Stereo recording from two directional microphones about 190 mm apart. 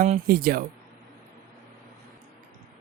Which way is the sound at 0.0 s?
45° right (ahead or behind).